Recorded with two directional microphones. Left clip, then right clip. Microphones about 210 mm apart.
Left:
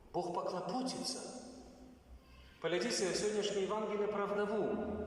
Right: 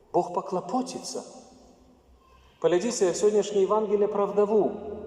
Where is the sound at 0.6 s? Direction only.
55° right (ahead or behind).